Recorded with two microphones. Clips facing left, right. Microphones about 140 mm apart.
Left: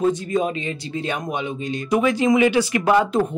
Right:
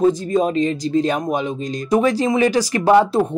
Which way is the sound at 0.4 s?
40° right (ahead or behind).